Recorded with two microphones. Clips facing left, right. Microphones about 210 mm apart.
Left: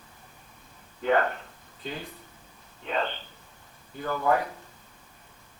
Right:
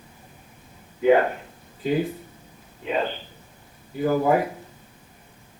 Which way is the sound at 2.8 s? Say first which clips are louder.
Right 5 dB; 10° right (ahead or behind).